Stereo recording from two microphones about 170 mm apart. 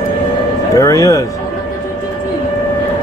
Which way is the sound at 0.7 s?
20° left (ahead or behind).